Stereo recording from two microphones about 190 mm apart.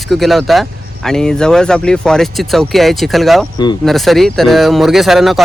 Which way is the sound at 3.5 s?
20° left (ahead or behind).